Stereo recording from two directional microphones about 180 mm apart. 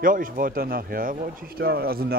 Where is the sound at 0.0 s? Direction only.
50° right (ahead or behind).